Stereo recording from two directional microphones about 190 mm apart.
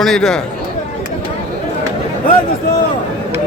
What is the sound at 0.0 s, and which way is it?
Speech, centre (ahead or behind).